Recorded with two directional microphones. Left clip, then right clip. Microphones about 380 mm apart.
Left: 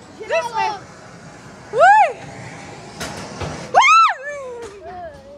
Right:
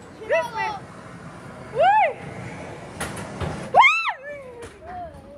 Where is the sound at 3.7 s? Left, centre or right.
Centre.